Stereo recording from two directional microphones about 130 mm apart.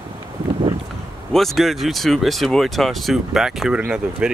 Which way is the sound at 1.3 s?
Centre (ahead or behind).